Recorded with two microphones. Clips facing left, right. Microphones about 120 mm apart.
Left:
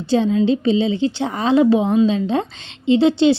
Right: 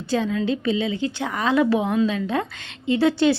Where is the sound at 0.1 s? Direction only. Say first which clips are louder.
Left 6 dB; 25° left (ahead or behind).